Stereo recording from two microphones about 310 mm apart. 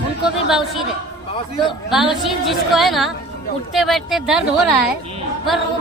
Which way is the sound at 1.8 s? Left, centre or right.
Centre.